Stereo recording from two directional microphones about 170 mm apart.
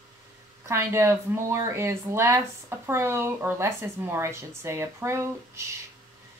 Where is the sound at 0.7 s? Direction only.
15° right (ahead or behind).